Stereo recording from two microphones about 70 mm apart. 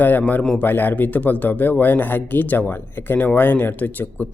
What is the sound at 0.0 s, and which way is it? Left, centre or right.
Speech, left.